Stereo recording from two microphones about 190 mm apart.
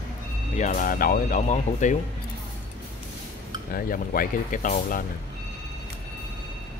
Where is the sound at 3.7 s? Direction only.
50° left (ahead or behind).